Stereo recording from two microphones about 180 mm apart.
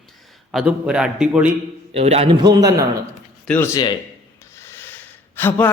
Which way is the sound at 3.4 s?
10° left (ahead or behind).